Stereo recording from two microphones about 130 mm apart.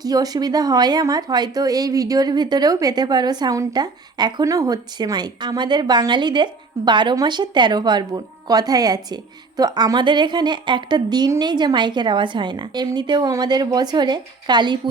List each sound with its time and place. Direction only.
0.0 s speech: 30° right (ahead or behind)